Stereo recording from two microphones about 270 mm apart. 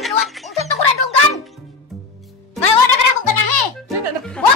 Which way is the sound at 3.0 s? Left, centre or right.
Left.